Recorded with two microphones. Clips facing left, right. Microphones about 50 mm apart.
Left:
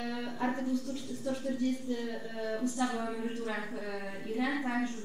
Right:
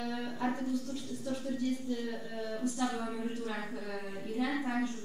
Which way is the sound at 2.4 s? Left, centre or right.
Left.